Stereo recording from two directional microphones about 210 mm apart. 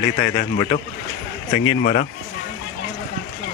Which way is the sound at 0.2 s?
35° left (ahead or behind).